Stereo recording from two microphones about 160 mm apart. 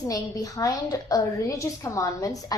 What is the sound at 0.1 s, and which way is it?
A woman's voice, 20° left (ahead or behind).